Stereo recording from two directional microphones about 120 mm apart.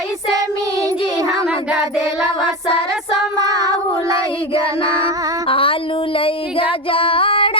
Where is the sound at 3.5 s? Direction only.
30° right (ahead or behind).